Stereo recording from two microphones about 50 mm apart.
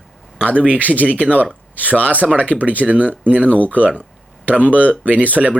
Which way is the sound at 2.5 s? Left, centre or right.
Left.